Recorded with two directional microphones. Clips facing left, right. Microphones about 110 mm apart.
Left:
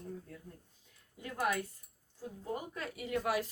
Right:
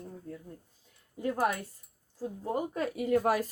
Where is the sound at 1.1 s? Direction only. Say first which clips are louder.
Right 5 dB; 40° right (ahead or behind).